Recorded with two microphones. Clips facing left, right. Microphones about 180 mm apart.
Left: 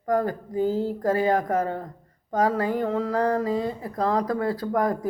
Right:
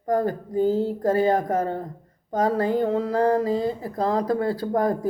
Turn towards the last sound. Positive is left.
turn(degrees=-30)  # may be behind; listen again after turning